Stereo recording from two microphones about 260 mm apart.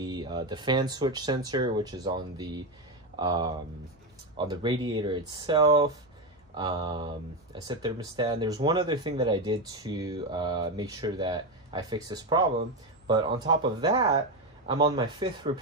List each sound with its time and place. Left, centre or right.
0.0 s speech: centre